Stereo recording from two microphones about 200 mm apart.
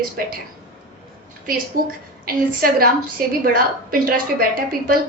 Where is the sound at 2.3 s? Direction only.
45° right (ahead or behind).